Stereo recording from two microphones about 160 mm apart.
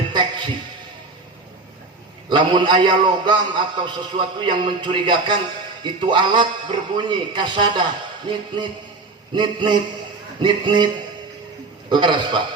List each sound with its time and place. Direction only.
0.1 s a sound: 30° right (ahead or behind)
2.3 s a man's voice: 30° right (ahead or behind)
11.9 s a man's voice: 30° right (ahead or behind)